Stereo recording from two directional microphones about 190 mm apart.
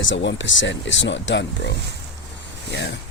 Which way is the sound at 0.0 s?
75° left (ahead or behind).